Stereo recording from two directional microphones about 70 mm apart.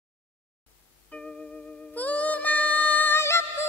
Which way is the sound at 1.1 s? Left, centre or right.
Centre.